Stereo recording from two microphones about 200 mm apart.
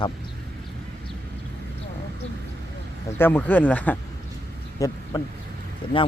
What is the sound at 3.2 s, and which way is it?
Speech, 10° left (ahead or behind).